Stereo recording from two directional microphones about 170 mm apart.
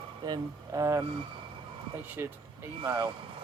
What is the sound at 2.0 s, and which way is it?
Speech, 10° right (ahead or behind).